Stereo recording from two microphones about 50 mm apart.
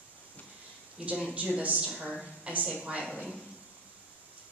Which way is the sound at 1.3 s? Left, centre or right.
Right.